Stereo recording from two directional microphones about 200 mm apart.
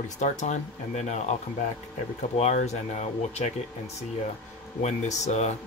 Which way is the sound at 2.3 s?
35° left (ahead or behind).